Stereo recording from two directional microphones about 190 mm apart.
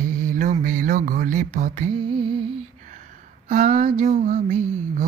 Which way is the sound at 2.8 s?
45° right (ahead or behind).